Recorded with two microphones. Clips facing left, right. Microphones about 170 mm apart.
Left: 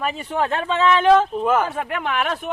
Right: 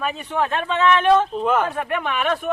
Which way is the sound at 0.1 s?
25° left (ahead or behind).